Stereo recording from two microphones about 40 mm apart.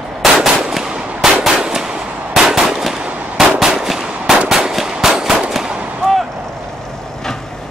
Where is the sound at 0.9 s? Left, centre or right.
Right.